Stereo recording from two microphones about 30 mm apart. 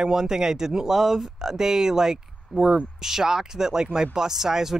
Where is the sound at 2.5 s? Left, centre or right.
Right.